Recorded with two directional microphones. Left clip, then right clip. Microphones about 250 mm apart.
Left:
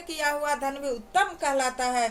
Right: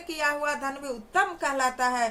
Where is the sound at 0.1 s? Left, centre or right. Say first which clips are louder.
Even; centre.